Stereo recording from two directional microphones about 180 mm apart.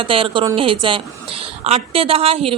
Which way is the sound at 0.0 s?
30° right (ahead or behind).